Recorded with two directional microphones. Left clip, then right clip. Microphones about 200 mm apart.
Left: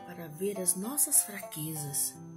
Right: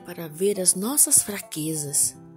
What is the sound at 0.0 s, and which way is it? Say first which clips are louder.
Speech: right 10 dB; 50° right (ahead or behind).